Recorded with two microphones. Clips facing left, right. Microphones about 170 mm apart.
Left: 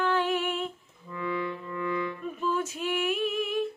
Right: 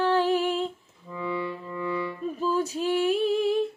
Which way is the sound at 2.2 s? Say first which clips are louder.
Right 4 dB; 35° right (ahead or behind).